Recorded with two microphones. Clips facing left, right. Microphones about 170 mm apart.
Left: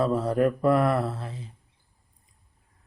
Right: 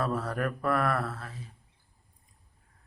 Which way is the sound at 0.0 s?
25° left (ahead or behind).